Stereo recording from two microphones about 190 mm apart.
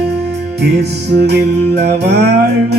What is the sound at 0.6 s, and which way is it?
Music, 60° right (ahead or behind).